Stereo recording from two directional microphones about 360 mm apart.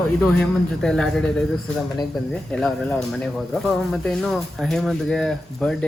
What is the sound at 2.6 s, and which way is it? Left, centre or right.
Speech, centre.